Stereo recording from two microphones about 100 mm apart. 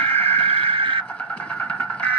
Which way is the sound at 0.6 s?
60° right (ahead or behind).